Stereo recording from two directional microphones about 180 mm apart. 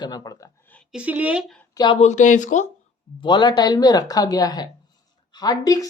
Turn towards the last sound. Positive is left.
turn(degrees=20)  # may be behind; listen again after turning